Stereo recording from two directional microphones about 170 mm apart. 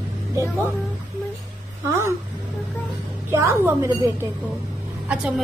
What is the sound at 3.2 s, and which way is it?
A woman's voice, 15° right (ahead or behind).